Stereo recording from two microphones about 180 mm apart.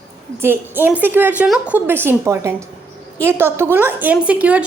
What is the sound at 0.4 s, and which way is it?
A woman's voice, 10° right (ahead or behind).